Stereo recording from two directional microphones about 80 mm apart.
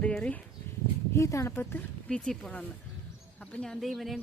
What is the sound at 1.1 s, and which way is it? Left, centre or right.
Speech, left.